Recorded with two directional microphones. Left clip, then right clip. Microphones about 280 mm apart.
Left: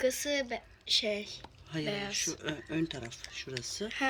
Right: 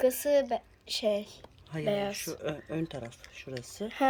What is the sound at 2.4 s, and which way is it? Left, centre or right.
Speech, centre.